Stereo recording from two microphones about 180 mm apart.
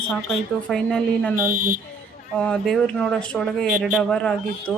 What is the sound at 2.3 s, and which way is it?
Speech, 5° left (ahead or behind).